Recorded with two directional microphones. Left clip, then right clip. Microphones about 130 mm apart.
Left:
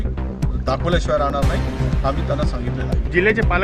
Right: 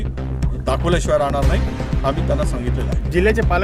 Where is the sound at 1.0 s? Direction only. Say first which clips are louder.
Right 3 dB; 20° right (ahead or behind).